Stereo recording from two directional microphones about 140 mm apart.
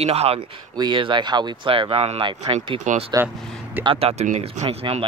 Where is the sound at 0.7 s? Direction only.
35° right (ahead or behind).